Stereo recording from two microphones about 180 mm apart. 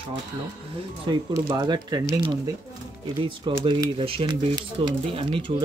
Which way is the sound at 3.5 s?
25° right (ahead or behind).